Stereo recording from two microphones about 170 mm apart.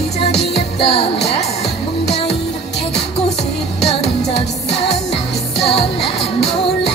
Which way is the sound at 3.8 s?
35° left (ahead or behind).